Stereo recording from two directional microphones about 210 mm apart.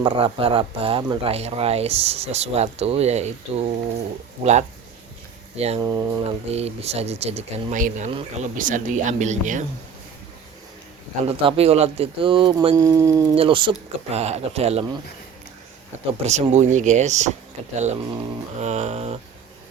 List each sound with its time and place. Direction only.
0.0 s speech: 25° right (ahead or behind)
5.5 s speech: 30° right (ahead or behind)
6.5 s speech: 30° right (ahead or behind)
11.3 s speech: 25° right (ahead or behind)
13.3 s speech: 25° right (ahead or behind)
16.2 s speech: 30° right (ahead or behind)